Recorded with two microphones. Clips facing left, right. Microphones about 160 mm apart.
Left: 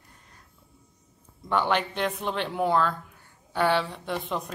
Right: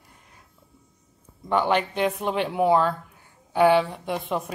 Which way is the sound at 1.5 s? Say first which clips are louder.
Right 3 dB; 5° right (ahead or behind).